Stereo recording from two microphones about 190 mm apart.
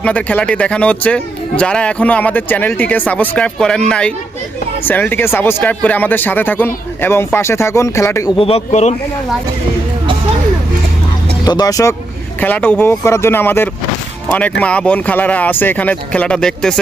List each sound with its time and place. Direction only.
0.0 s a man's voice: 5° left (ahead or behind)
8.4 s a man's voice: 30° left (ahead or behind)
11.4 s a man's voice: 20° left (ahead or behind); by 16.8 s 5° left (ahead or behind)